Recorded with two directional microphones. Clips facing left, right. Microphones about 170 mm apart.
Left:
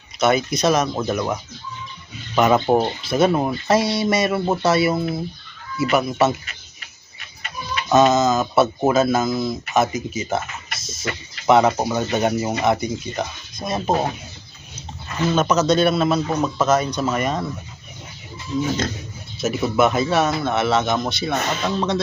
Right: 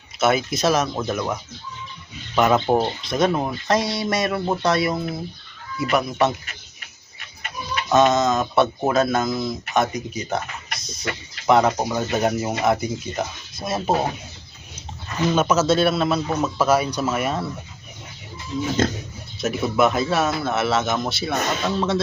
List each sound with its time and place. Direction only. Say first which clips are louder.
0.2 s speech: left 1 dB; centre (ahead or behind)
7.9 s speech: left 2 dB; 5° left (ahead or behind)
15.3 s speech: left 1 dB; 10° right (ahead or behind)
19.4 s speech: left 1 dB; centre (ahead or behind)